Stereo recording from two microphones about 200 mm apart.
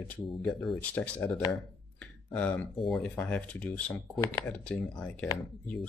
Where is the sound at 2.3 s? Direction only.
5° left (ahead or behind).